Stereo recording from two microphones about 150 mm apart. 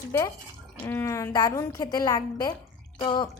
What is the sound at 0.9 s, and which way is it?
A woman's voice, 15° left (ahead or behind).